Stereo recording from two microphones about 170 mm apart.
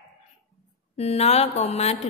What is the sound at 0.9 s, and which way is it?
A woman's voice, 40° left (ahead or behind).